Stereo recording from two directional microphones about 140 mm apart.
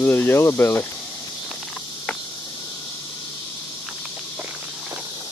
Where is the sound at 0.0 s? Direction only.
15° left (ahead or behind).